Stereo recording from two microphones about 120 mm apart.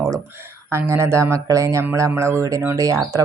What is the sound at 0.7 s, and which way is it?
Speech, 25° right (ahead or behind).